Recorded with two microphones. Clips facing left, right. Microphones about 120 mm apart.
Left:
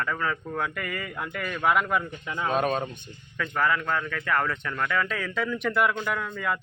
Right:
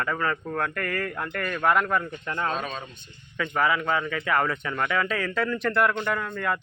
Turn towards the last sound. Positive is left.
turn(degrees=0)  # may be behind; listen again after turning